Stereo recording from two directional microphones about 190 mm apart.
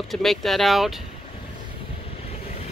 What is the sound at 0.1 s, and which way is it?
Speech, centre (ahead or behind).